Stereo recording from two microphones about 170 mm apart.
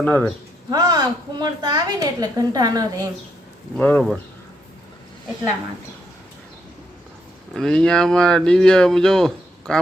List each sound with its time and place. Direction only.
0.0 s speech: 10° left (ahead or behind)
0.7 s a woman's voice: 20° right (ahead or behind)
3.8 s speech: 5° left (ahead or behind)
7.5 s speech: 5° left (ahead or behind)